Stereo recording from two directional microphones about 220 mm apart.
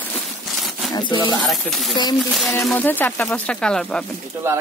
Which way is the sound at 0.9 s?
20° left (ahead or behind).